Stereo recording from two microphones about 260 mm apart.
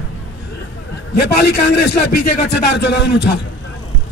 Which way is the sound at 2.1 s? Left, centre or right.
Left.